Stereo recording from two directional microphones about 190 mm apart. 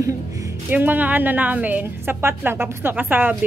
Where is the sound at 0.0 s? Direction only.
15° right (ahead or behind).